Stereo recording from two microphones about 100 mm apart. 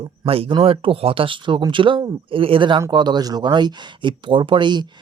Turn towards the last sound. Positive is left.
turn(degrees=-50)  # may be behind; listen again after turning